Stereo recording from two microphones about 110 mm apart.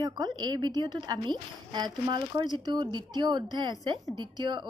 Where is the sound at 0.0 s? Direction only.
40° right (ahead or behind).